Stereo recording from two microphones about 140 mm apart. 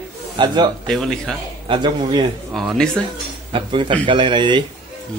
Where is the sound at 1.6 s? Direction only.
35° right (ahead or behind).